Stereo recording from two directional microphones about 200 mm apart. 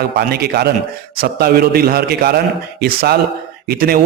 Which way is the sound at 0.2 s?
50° right (ahead or behind).